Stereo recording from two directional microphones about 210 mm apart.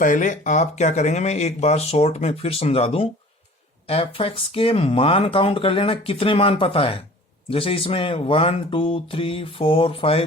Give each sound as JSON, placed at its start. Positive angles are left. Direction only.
{"t": 0.0, "sound": "speech", "side_deg": 40}